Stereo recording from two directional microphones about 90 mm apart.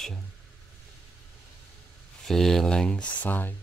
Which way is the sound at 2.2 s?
5° left (ahead or behind).